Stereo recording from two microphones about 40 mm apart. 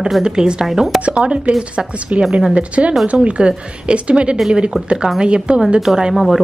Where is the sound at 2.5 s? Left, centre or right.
Right.